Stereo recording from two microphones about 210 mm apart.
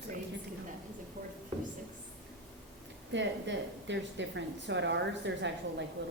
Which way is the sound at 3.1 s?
60° right (ahead or behind).